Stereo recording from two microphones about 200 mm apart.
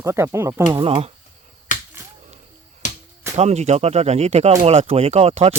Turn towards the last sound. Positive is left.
turn(degrees=-30)  # may be behind; listen again after turning